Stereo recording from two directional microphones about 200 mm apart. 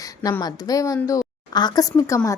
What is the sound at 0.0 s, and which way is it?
Speech, 15° left (ahead or behind).